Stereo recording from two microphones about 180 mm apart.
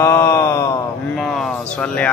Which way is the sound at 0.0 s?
15° left (ahead or behind).